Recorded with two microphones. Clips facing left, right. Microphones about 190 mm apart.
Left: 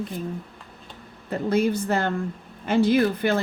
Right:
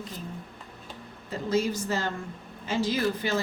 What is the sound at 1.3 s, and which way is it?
A woman's voice, 60° left (ahead or behind).